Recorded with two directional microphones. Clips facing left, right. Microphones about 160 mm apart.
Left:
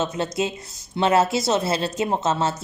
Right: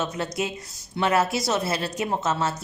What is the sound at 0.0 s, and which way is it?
Speech, 25° left (ahead or behind).